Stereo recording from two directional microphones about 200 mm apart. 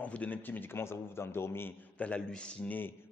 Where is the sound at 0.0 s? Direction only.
5° left (ahead or behind).